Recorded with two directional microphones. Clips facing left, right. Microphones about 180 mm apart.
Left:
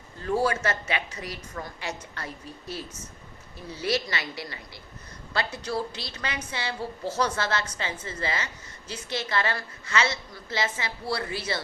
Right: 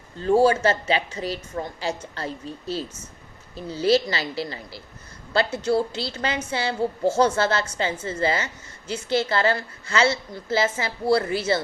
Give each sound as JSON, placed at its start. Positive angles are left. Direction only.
{"t": 0.2, "sound": "a woman's voice", "side_deg": -30}